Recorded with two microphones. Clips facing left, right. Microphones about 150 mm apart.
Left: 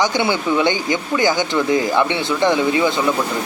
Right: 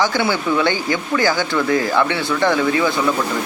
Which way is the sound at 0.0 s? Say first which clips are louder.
Even; 20° left (ahead or behind).